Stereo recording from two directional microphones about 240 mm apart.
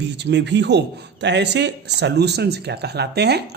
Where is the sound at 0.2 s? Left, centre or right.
Right.